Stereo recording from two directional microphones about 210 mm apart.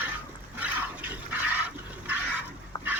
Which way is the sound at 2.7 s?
20° left (ahead or behind).